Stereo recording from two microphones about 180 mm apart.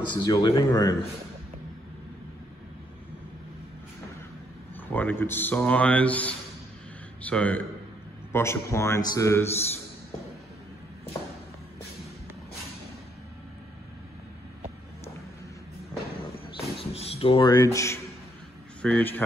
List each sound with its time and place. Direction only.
0.0 s speech: 25° left (ahead or behind)
4.8 s speech: 10° left (ahead or behind)
16.9 s speech: 35° left (ahead or behind); by 19.2 s 10° left (ahead or behind)